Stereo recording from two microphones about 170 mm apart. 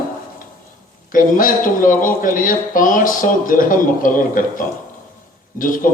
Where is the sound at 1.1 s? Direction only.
50° left (ahead or behind).